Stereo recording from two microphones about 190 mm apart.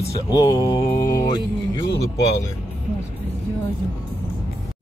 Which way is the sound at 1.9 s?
60° left (ahead or behind).